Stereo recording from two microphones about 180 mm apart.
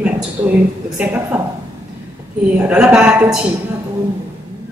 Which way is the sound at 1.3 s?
10° right (ahead or behind).